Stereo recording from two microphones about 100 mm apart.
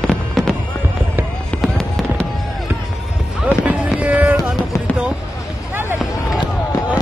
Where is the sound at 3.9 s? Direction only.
15° right (ahead or behind).